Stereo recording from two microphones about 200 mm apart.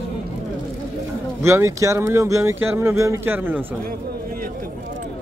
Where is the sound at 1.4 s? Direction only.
15° right (ahead or behind).